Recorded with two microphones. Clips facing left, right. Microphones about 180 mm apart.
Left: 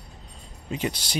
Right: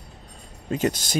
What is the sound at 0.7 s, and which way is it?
Speech, 45° right (ahead or behind).